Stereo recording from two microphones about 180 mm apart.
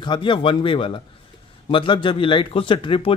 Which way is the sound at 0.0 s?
25° left (ahead or behind).